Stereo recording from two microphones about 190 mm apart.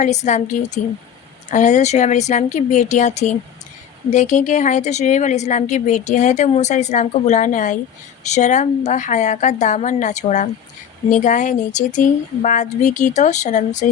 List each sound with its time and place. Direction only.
0.0 s a woman's voice: 40° left (ahead or behind)